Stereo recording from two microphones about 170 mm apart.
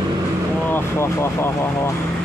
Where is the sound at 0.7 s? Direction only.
15° left (ahead or behind).